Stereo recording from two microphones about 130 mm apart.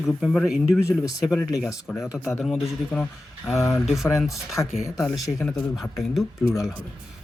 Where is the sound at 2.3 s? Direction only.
5° left (ahead or behind).